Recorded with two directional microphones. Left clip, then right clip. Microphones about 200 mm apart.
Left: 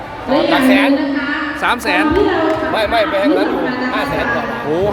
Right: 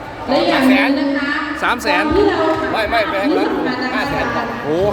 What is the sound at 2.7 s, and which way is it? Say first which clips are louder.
Speech: left 2 dB; 15° left (ahead or behind).